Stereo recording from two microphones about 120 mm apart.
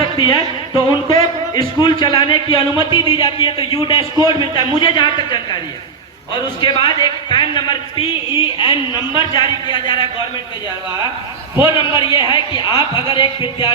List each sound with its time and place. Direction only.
0.2 s a man's voice: 40° left (ahead or behind)
6.6 s a man's voice: 40° left (ahead or behind)
11.7 s a man's voice: 45° left (ahead or behind)